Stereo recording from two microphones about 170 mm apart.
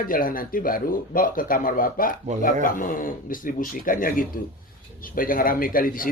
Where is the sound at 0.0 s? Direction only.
55° left (ahead or behind).